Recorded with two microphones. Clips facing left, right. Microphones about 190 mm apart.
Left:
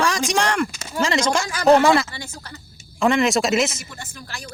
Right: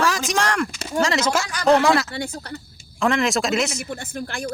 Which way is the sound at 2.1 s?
65° right (ahead or behind).